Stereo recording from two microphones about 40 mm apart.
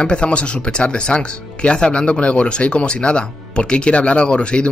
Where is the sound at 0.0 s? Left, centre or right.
Left.